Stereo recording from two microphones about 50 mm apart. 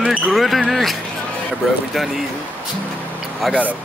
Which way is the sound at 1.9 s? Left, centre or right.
Centre.